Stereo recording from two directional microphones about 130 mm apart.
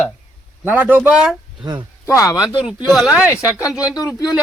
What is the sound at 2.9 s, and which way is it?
Speech, 5° right (ahead or behind).